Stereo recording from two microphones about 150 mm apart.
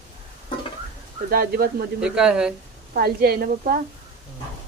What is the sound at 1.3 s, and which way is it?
Speech, 80° right.